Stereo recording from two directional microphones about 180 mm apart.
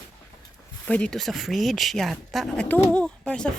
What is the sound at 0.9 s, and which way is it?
Speech, 5° left (ahead or behind).